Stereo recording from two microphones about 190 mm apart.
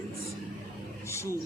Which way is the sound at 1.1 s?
15° left (ahead or behind).